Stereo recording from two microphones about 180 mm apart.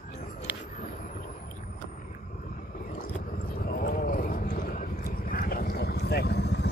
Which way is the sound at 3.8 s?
50° left (ahead or behind).